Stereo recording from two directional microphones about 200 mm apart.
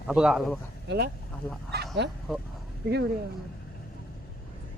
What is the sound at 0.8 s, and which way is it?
Speech, 55° right (ahead or behind).